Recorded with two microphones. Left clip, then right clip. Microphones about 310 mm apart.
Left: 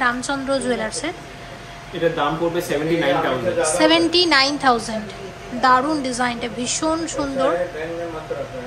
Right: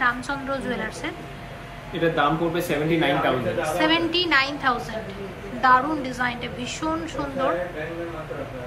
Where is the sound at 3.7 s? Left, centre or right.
Centre.